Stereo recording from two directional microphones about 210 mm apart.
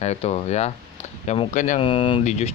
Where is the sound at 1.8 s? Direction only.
25° left (ahead or behind).